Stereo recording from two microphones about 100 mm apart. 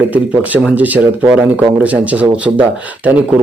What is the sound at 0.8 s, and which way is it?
Speech, 15° right (ahead or behind).